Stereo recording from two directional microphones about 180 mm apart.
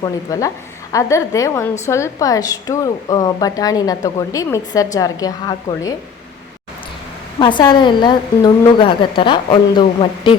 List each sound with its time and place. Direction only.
0.0 s a woman's voice: 20° left (ahead or behind)
7.3 s a woman's voice: 25° left (ahead or behind)